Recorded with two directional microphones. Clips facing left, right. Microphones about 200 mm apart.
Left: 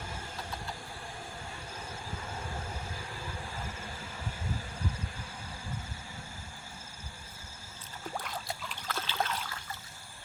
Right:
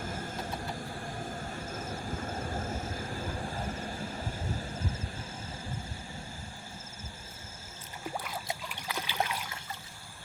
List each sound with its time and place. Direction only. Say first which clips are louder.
0.0 s vehicle: right 5 dB; 45° right (ahead or behind)
1.5 s vehicle: right 6 dB; 45° right (ahead or behind)
8.0 s rowboat: right 1 dB; 10° right (ahead or behind)
8.4 s trickle: right 1 dB; 15° right (ahead or behind)